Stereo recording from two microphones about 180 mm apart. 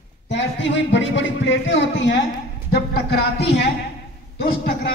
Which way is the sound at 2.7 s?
60° left (ahead or behind).